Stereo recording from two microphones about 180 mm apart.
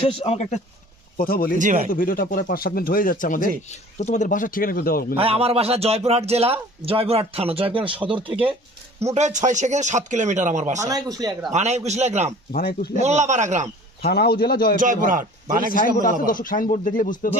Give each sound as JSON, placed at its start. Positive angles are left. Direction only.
{"t": 0.0, "sound": "speech", "side_deg": 35}
{"t": 1.1, "sound": "speech", "side_deg": 55}
{"t": 1.5, "sound": "a man's voice", "side_deg": -45}
{"t": 1.9, "sound": "speech", "side_deg": 50}
{"t": 5.1, "sound": "speech", "side_deg": -30}
{"t": 9.0, "sound": "speech", "side_deg": -40}
{"t": 10.8, "sound": "speech", "side_deg": -20}
{"t": 11.5, "sound": "speech", "side_deg": -40}
{"t": 12.5, "sound": "a man's voice", "side_deg": 60}
{"t": 13.0, "sound": "speech", "side_deg": -40}
{"t": 14.0, "sound": "a man's voice", "side_deg": 60}
{"t": 14.8, "sound": "a man's voice", "side_deg": -45}
{"t": 16.0, "sound": "speech", "side_deg": 50}